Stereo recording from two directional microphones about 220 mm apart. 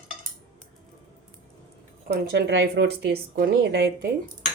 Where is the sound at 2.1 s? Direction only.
50° right (ahead or behind).